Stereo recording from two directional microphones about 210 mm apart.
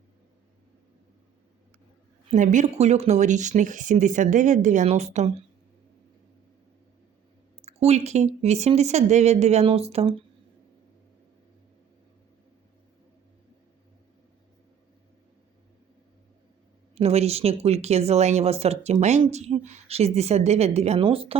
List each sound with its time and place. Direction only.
2.3 s speech: 35° right (ahead or behind)
7.6 s a woman's voice: 30° right (ahead or behind)
16.9 s speech: 30° right (ahead or behind)